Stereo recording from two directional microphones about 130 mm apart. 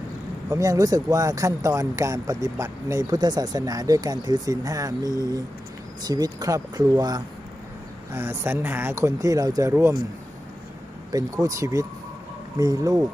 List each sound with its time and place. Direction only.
0.5 s speech: 25° right (ahead or behind)
5.1 s speech: 25° left (ahead or behind)
6.0 s speech: 30° right (ahead or behind)
8.1 s speech: 20° right (ahead or behind)
11.1 s speech: 25° right (ahead or behind)